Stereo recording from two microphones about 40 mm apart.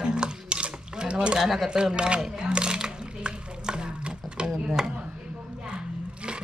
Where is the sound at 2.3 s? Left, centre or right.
Right.